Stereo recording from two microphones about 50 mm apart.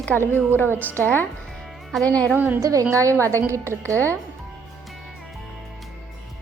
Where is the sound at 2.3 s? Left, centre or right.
Right.